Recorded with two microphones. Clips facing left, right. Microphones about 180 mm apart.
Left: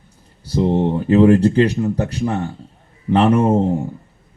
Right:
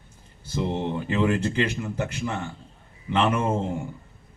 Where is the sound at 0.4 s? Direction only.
35° left (ahead or behind).